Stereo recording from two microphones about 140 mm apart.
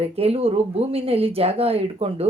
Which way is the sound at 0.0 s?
45° right (ahead or behind).